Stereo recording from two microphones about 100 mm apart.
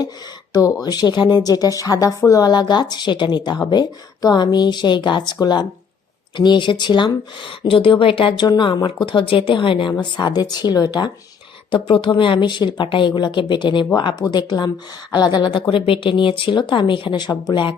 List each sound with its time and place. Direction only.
0.5 s speech: 40° left (ahead or behind); by 8.4 s 60° left (ahead or behind)
8.4 s speech: 50° left (ahead or behind)
11.7 s speech: 60° left (ahead or behind)